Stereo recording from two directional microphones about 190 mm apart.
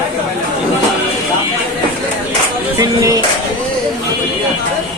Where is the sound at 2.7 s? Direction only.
20° right (ahead or behind).